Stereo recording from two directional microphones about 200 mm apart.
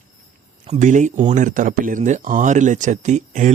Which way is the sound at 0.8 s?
40° right (ahead or behind).